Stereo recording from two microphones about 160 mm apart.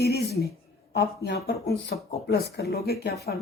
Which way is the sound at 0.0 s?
85° left.